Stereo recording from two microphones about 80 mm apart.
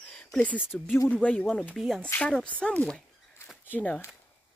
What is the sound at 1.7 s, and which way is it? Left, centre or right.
Speech, centre.